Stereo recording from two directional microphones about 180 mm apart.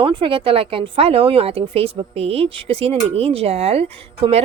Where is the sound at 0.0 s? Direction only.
25° right (ahead or behind).